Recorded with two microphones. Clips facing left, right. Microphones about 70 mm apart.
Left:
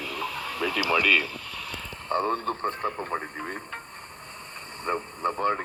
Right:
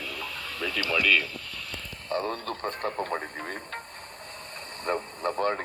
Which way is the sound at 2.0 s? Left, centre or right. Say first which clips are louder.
Left 4 dB; left.